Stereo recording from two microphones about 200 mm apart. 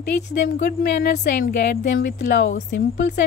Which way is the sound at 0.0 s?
55° left (ahead or behind).